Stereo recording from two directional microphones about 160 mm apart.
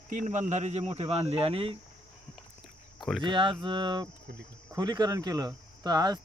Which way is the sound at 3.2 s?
30° right (ahead or behind).